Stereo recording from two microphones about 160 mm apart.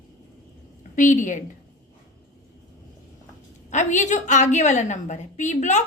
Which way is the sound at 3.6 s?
50° left (ahead or behind).